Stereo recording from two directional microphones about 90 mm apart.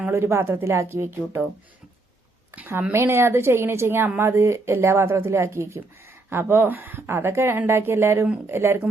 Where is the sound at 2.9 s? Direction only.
30° right (ahead or behind).